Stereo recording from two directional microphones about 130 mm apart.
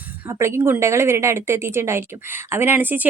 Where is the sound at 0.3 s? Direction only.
20° right (ahead or behind).